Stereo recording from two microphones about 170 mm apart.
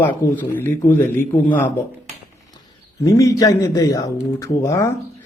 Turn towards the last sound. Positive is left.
turn(degrees=20)  # may be behind; listen again after turning